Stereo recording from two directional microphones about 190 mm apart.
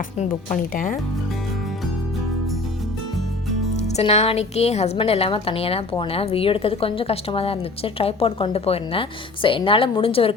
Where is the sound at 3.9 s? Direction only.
35° left (ahead or behind).